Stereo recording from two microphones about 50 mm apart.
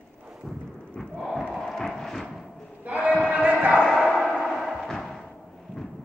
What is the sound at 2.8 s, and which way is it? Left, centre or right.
Sheep, right.